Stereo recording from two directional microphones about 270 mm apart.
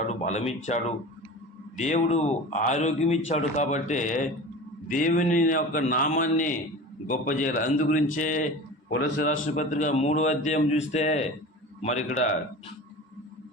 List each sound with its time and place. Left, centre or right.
0.1 s a man's voice: left